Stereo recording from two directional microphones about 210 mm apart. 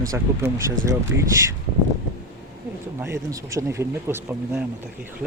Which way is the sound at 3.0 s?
15° right (ahead or behind).